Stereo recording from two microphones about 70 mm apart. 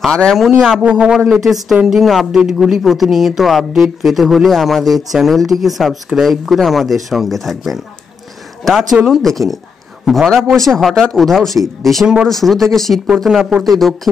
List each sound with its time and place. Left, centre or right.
0.0 s speech: centre
0.8 s speech: centre
1.3 s speech: centre